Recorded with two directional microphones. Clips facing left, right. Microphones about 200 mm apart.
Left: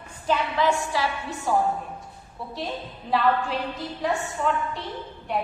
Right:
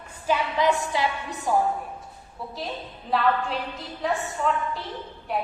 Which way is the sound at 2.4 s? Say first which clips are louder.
Left 1 dB; centre (ahead or behind).